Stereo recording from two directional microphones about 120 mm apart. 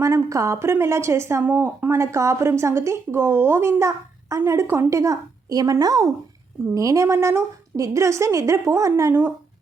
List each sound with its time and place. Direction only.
0.0 s speech: 25° right (ahead or behind)